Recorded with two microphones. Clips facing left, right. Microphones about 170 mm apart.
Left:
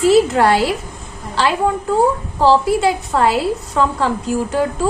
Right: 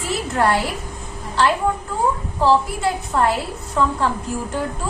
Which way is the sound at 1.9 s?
90° left.